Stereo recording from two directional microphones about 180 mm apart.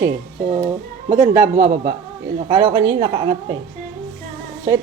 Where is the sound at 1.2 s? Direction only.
45° right (ahead or behind).